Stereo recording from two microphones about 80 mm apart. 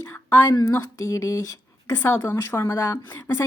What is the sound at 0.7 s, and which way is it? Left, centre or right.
Speech, left.